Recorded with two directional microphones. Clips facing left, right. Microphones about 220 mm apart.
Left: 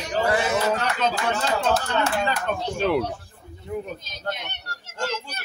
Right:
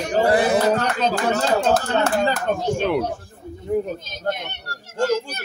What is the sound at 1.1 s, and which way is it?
Speech, 45° right (ahead or behind).